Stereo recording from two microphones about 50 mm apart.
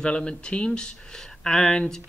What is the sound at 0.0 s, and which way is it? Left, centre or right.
Speech, left.